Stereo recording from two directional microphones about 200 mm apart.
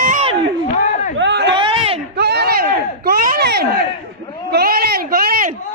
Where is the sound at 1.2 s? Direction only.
60° right (ahead or behind).